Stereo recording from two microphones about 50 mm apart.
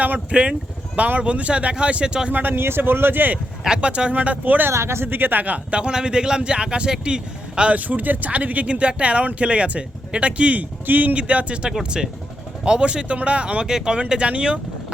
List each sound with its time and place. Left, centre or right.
0.0 s speech: right
2.3 s speech: right
3.8 s speech: right
4.7 s speech: right
5.0 s speech: right; by 7.8 s centre
7.8 s speech: right